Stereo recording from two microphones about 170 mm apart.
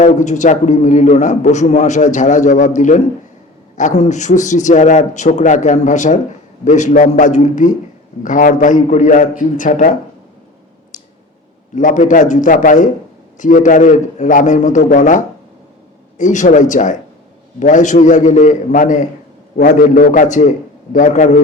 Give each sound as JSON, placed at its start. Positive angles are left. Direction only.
{"t": 0.0, "sound": "a man's voice", "side_deg": 45}
{"t": 10.9, "sound": "a sound", "side_deg": 50}
{"t": 11.7, "sound": "a man's voice", "side_deg": 50}